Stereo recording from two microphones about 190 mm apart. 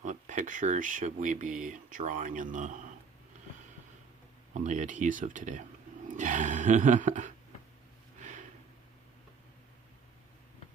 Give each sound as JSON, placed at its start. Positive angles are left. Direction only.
{"t": 0.0, "sound": "speech", "side_deg": -40}
{"t": 4.5, "sound": "speech", "side_deg": -40}
{"t": 8.2, "sound": "a sound", "side_deg": -40}